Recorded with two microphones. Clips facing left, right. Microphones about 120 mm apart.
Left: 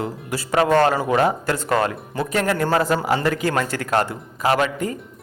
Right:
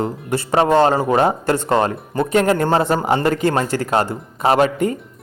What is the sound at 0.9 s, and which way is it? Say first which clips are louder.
A man's voice: right 3 dB; 35° right (ahead or behind).